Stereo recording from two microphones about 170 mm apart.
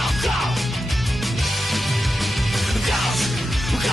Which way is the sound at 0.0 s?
Centre (ahead or behind).